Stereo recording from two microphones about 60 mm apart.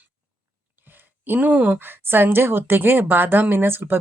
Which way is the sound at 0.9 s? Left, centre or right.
Right.